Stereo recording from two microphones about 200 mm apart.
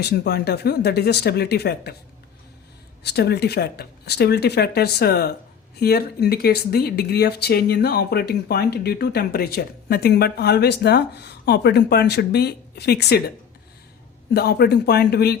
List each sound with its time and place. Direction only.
0.0 s speech: 55° left (ahead or behind)
3.0 s speech: 55° left (ahead or behind)
14.3 s speech: 50° left (ahead or behind)